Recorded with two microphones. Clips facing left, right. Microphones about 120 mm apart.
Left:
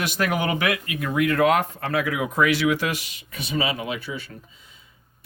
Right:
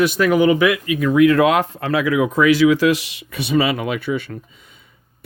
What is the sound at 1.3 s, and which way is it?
Speech, 90° right.